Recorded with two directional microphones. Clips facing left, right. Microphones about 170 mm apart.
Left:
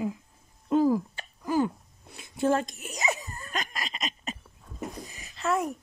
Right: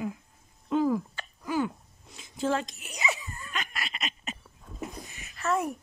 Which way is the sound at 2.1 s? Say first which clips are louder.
Left 3 dB; 60° left (ahead or behind).